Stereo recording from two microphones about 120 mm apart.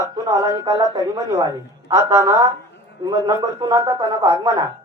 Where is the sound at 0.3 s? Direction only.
30° right (ahead or behind).